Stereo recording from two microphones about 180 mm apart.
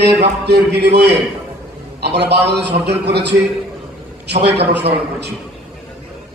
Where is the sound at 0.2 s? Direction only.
65° right (ahead or behind).